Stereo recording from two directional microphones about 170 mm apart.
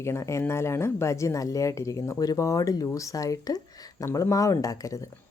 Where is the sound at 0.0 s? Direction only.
15° left (ahead or behind).